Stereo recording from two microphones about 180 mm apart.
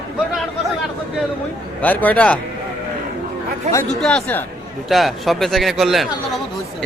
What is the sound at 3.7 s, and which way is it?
Speech, 40° right (ahead or behind).